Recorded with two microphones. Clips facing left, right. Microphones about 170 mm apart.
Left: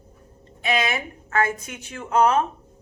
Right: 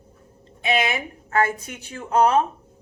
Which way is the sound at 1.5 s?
35° right (ahead or behind).